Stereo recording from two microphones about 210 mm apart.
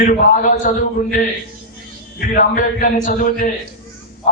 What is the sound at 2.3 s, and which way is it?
A man's voice, 40° left (ahead or behind).